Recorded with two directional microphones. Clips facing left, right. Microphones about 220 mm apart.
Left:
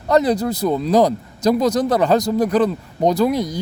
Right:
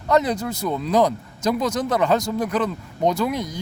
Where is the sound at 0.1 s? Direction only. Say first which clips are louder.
Left 4 dB; 35° left (ahead or behind).